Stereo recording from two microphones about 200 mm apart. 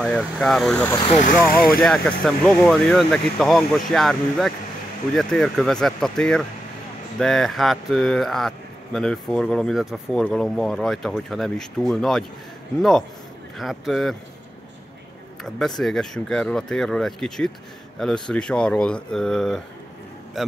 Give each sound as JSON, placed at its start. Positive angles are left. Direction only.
{"t": 0.0, "sound": "speech", "side_deg": 0}
{"t": 0.9, "sound": "speech", "side_deg": 30}
{"t": 1.2, "sound": "speech", "side_deg": 45}
{"t": 1.8, "sound": "speech", "side_deg": 0}
{"t": 13.6, "sound": "speech", "side_deg": 0}
{"t": 15.4, "sound": "speech", "side_deg": 0}